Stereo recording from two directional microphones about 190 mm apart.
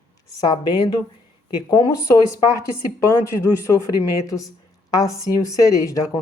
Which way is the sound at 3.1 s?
15° left (ahead or behind).